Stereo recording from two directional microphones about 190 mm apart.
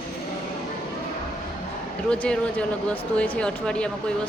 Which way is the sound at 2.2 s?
5° left (ahead or behind).